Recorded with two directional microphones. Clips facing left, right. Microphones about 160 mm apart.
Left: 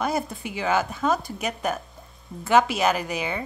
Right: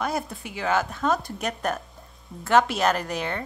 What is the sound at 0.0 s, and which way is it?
A woman's voice, centre (ahead or behind).